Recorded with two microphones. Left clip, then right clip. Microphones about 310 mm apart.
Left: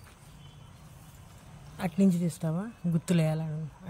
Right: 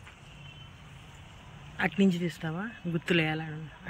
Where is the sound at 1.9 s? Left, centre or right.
Left.